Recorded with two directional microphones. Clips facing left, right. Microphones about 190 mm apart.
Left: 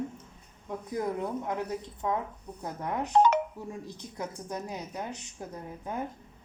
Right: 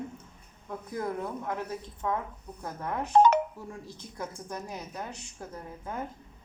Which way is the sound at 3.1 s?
45° right (ahead or behind).